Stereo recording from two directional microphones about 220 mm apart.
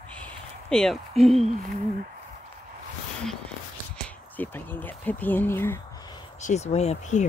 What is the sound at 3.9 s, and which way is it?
Speech, 10° left (ahead or behind).